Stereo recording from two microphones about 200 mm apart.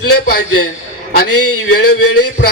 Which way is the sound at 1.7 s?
55° left (ahead or behind).